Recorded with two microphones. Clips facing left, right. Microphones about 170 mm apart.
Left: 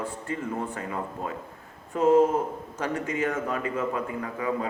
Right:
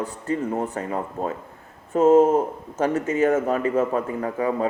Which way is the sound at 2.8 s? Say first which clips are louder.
Right 8 dB; 30° right (ahead or behind).